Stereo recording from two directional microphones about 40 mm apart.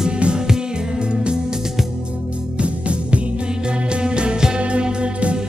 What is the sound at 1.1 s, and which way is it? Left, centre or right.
Music, right.